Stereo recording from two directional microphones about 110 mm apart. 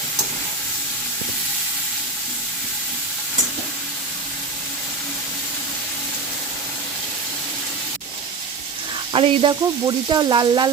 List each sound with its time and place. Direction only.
9.1 s sizzle: 55° right (ahead or behind)
9.5 s speech: 40° right (ahead or behind)